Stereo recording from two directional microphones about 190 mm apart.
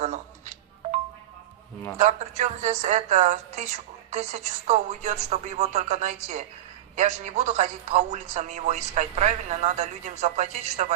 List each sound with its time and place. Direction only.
0.0 s music: 40° right (ahead or behind)
2.0 s speech: 40° right (ahead or behind)